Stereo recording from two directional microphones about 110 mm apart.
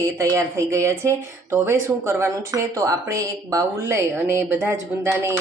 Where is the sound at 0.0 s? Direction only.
30° right (ahead or behind).